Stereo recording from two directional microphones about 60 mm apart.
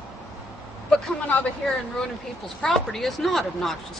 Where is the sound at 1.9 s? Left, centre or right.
Centre.